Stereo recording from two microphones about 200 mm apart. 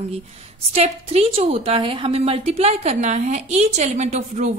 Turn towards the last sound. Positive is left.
turn(degrees=-35)  # may be behind; listen again after turning